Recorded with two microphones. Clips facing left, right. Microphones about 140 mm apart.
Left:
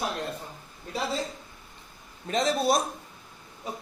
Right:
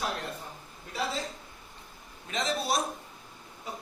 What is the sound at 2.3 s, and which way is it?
Speech, 40° left (ahead or behind).